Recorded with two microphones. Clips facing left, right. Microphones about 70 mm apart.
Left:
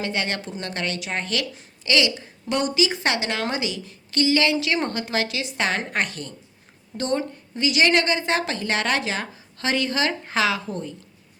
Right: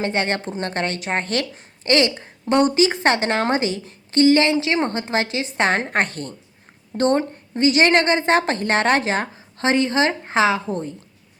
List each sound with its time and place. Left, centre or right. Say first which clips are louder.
0.0 s a woman's voice: right 5 dB; right